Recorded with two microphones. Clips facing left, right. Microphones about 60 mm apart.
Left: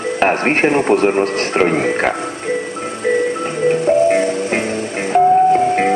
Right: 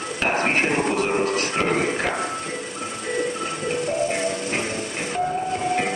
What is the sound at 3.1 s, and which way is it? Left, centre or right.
Music, left.